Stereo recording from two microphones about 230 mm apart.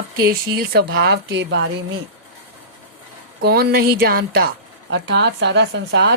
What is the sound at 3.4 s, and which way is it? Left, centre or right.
A woman's voice, right.